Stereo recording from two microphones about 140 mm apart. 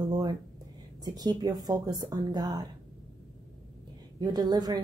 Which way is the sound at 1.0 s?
30° right (ahead or behind).